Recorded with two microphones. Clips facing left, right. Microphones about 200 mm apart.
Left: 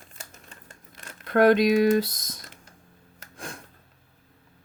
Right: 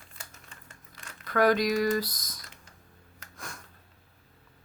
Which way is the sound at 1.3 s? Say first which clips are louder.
Left 6 dB; 25° left (ahead or behind).